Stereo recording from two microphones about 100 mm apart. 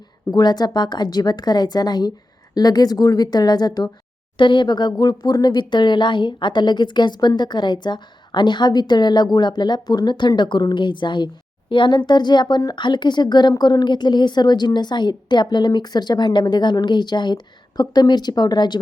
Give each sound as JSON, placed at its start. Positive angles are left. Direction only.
{"t": 0.3, "sound": "a woman's voice", "side_deg": 45}